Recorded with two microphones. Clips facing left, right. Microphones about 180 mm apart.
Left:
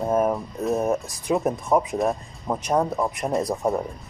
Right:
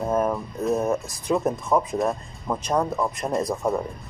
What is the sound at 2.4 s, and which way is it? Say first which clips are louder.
Speech: left 1 dB; 15° left (ahead or behind).